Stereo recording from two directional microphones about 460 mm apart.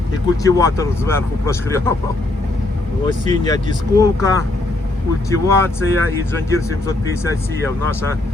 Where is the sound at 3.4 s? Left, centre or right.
Centre.